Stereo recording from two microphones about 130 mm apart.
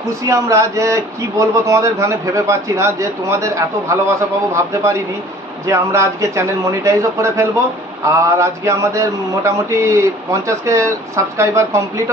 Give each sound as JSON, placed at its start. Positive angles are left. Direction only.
{"t": 0.2, "sound": "speech", "side_deg": -25}